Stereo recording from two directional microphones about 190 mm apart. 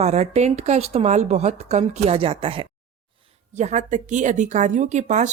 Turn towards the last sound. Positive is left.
turn(degrees=-40)  # may be behind; listen again after turning